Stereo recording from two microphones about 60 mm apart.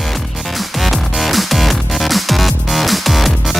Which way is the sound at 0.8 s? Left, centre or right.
Centre.